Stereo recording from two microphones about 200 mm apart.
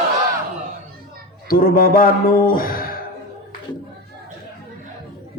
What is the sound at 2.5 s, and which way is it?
Music, 45° left (ahead or behind).